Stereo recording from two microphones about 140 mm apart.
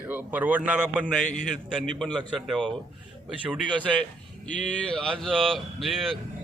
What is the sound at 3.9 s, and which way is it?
A man's voice, centre (ahead or behind).